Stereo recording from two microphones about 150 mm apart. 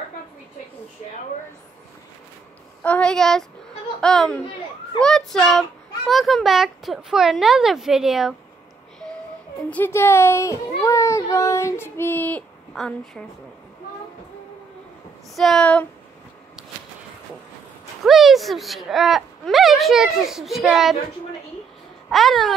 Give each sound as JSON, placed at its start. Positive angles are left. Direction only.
{"t": 2.8, "sound": "a child's voice", "side_deg": 10}
{"t": 9.7, "sound": "a child's voice", "side_deg": 15}
{"t": 15.3, "sound": "a child's voice", "side_deg": 0}
{"t": 18.0, "sound": "a child's voice", "side_deg": 0}
{"t": 22.1, "sound": "a child's voice", "side_deg": 0}